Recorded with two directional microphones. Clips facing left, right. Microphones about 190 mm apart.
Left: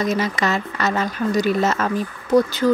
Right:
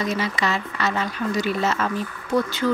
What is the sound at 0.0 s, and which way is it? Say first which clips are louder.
Speech: left 3 dB; 45° left (ahead or behind).